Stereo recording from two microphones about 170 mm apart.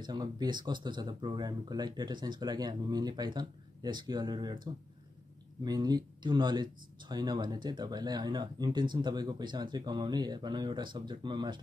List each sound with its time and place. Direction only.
0.0 s speech: 25° right (ahead or behind)
5.6 s speech: 25° right (ahead or behind)